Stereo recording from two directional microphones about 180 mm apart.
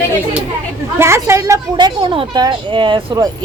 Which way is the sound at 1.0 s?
15° right (ahead or behind).